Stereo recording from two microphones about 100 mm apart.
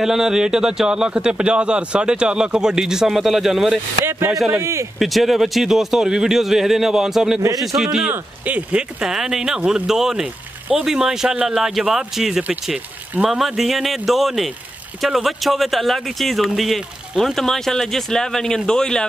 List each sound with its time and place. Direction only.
0.0 s a man's voice: 5° right (ahead or behind)
4.0 s speech: 25° right (ahead or behind)
4.9 s speech: centre (ahead or behind)